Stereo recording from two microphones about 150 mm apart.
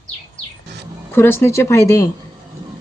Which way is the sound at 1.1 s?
15° left (ahead or behind).